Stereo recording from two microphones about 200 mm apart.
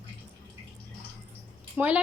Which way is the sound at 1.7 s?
5° right (ahead or behind).